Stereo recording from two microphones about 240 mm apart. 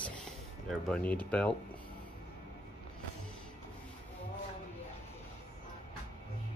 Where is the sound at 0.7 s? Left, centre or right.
Centre.